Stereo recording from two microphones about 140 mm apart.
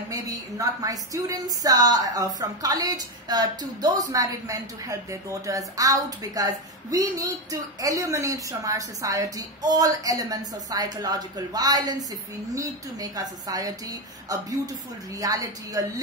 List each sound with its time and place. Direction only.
0.1 s a woman's voice: 25° right (ahead or behind)